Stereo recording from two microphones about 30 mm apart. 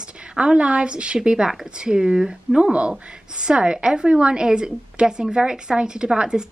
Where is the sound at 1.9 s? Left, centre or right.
Right.